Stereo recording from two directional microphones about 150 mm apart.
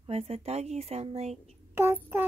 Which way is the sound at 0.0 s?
40° right (ahead or behind).